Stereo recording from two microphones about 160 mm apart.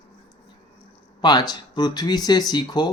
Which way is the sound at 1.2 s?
25° left (ahead or behind).